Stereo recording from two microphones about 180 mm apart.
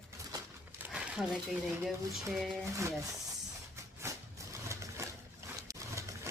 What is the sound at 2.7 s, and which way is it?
Speech, 15° right (ahead or behind).